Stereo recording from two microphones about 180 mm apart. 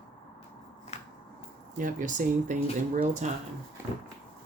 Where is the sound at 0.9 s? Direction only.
35° left (ahead or behind).